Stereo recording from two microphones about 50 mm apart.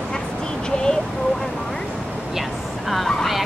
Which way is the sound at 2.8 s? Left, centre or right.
Centre.